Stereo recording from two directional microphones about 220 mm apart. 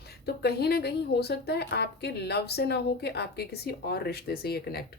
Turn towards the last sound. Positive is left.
turn(degrees=45)  # may be behind; listen again after turning